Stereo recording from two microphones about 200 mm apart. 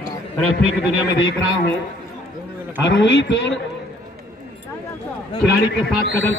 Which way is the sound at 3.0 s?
65° left (ahead or behind).